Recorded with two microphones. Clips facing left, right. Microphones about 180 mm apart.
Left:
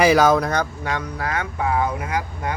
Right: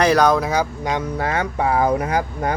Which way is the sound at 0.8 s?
20° right (ahead or behind).